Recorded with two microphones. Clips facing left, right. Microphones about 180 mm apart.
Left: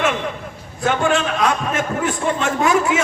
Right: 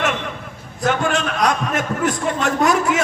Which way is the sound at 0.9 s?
40° right (ahead or behind).